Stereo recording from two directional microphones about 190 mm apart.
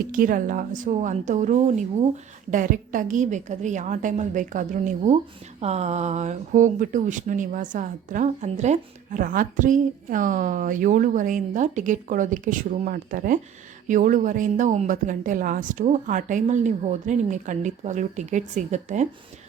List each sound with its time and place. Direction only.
0.1 s a woman's voice: 45° right (ahead or behind)